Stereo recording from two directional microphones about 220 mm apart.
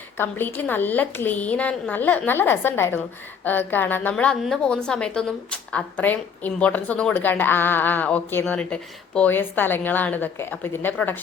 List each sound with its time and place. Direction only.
0.2 s a woman's voice: 10° left (ahead or behind)